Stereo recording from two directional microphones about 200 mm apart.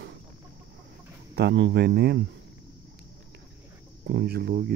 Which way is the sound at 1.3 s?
55° right (ahead or behind).